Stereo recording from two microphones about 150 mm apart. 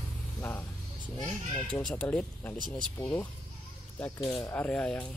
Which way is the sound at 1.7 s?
10° left (ahead or behind).